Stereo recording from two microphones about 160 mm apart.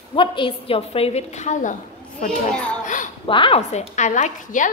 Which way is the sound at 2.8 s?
50° left (ahead or behind).